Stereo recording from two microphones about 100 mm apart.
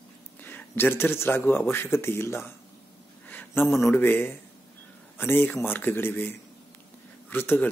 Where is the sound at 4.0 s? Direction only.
20° left (ahead or behind).